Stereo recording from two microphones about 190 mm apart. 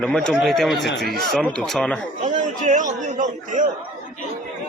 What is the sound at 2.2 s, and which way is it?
A man's voice, 40° right (ahead or behind).